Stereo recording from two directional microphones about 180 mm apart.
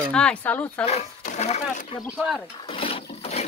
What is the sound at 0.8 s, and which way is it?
Speech, 40° left (ahead or behind).